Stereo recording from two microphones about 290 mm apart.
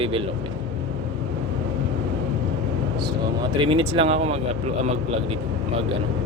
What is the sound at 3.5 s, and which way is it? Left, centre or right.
Speech, centre.